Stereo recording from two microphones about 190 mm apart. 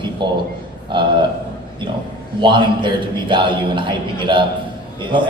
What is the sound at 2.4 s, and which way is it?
A man's voice, 25° right (ahead or behind).